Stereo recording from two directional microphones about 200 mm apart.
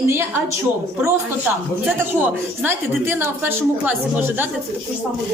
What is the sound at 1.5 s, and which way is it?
A woman's voice, 10° right (ahead or behind).